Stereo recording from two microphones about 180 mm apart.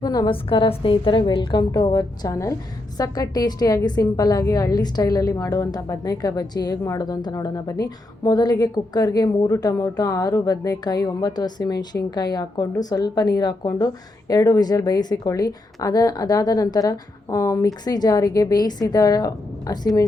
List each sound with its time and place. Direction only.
0.0 s a woman's voice: 20° left (ahead or behind)